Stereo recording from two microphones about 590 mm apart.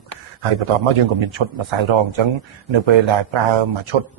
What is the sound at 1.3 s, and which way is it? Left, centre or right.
A man's voice, right.